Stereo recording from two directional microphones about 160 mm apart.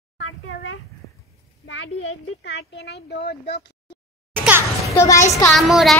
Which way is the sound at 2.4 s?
90° left.